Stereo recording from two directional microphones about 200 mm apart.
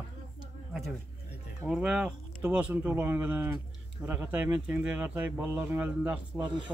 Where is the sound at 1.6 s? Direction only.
5° right (ahead or behind).